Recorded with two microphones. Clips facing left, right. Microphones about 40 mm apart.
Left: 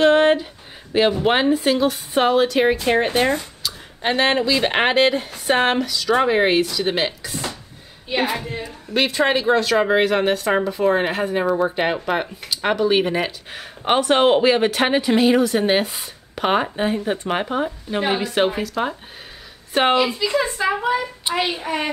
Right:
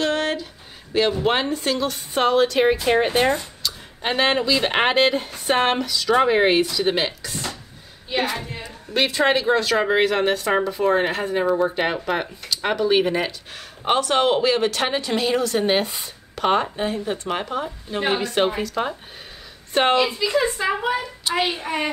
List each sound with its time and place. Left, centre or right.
0.0 s a sound: left
0.9 s a woman's voice: centre
8.6 s speech: centre
16.3 s speech: centre
18.0 s a woman's voice: centre